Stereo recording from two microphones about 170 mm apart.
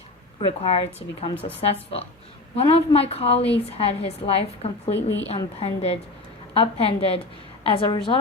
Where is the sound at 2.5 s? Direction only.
35° left (ahead or behind).